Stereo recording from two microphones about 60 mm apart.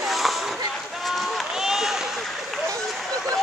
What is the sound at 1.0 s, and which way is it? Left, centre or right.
Run, centre.